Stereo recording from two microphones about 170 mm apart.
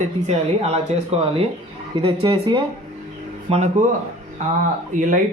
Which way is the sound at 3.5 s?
40° right (ahead or behind).